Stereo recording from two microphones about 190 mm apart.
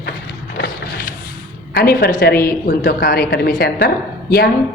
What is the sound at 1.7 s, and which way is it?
A woman's voice, 50° left (ahead or behind).